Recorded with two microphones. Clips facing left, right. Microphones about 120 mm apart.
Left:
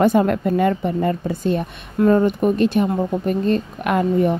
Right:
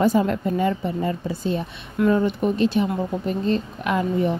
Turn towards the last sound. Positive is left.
turn(degrees=50)  # may be behind; listen again after turning